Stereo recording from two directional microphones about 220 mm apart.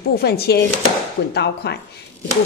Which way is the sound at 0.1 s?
45° left (ahead or behind).